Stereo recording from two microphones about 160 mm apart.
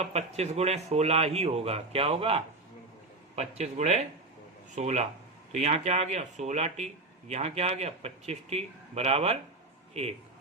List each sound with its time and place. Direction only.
0.0 s a man's voice: 40° right (ahead or behind)